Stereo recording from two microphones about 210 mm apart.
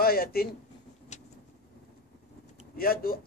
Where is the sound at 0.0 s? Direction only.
45° left (ahead or behind).